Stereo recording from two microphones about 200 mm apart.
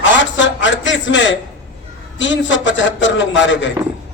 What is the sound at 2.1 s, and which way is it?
A man's voice, 65° left (ahead or behind).